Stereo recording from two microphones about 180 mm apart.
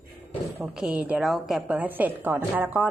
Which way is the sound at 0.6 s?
5° right (ahead or behind).